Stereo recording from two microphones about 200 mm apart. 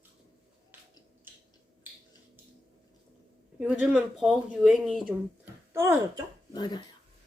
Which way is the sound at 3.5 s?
5° right (ahead or behind).